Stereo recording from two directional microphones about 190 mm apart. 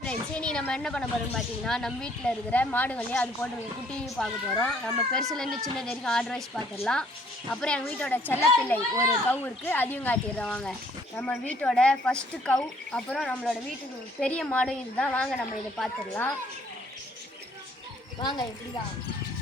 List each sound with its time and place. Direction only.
0.0 s speech: 5° left (ahead or behind)
18.2 s speech: 20° left (ahead or behind)